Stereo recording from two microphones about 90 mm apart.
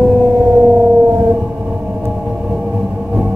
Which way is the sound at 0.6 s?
20° right (ahead or behind).